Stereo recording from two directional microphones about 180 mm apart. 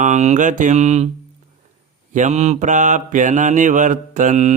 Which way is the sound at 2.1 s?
40° right (ahead or behind).